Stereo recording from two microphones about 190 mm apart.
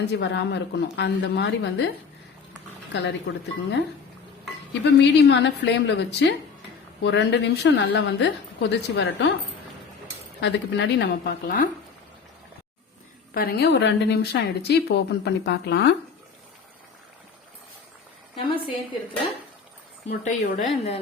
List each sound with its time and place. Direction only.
0.0 s a woman's voice: 65° left (ahead or behind)
2.9 s speech: 65° left (ahead or behind)
4.7 s a woman's voice: 65° left (ahead or behind)
10.4 s a woman's voice: 65° left (ahead or behind); by 11.7 s 50° left (ahead or behind)
13.3 s a woman's voice: 55° left (ahead or behind)
18.3 s a woman's voice: 30° left (ahead or behind)
20.1 s speech: 40° left (ahead or behind)